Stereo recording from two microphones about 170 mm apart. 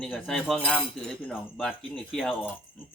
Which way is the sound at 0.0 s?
5° left (ahead or behind).